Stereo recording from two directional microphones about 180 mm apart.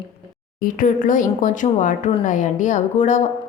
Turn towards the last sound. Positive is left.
turn(degrees=40)  # may be behind; listen again after turning